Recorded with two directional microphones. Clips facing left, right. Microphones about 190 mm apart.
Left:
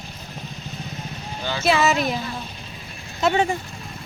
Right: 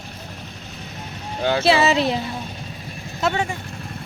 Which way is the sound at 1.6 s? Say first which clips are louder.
Right 1 dB; 30° right (ahead or behind).